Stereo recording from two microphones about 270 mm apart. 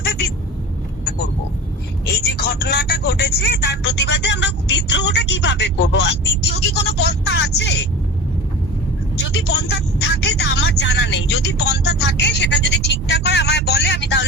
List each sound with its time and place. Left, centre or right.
0.0 s a sound: left
2.2 s speech: left
9.3 s speech: left